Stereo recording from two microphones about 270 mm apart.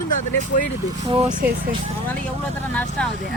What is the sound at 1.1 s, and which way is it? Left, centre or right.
Speech, centre.